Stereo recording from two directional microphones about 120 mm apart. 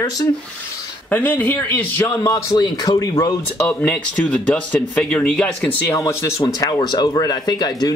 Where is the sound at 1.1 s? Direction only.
15° left (ahead or behind); by 3.3 s 30° left (ahead or behind).